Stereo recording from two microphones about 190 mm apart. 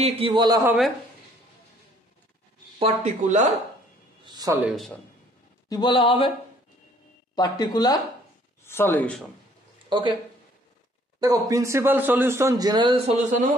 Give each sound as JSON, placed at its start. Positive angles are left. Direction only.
{"t": 0.0, "sound": "a man's voice", "side_deg": -30}
{"t": 2.8, "sound": "speech", "side_deg": -40}
{"t": 4.2, "sound": "speech", "side_deg": -20}
{"t": 4.6, "sound": "a man's voice", "side_deg": 0}
{"t": 5.7, "sound": "speech", "side_deg": 25}
{"t": 7.3, "sound": "speech", "side_deg": 20}
{"t": 9.8, "sound": "speech", "side_deg": -25}
{"t": 11.1, "sound": "speech", "side_deg": -20}